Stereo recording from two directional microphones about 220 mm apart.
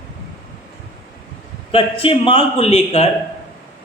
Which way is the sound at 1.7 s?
25° left (ahead or behind).